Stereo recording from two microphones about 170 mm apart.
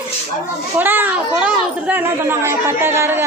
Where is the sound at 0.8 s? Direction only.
10° right (ahead or behind).